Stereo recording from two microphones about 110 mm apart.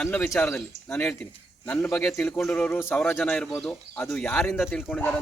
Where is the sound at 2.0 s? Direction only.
5° left (ahead or behind).